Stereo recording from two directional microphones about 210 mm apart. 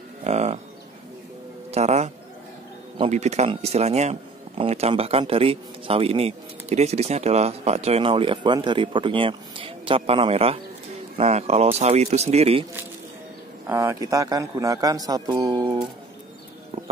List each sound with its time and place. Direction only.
0.2 s livestock: 30° right (ahead or behind)
1.7 s speech: 30° right (ahead or behind)
13.7 s speech: 15° right (ahead or behind)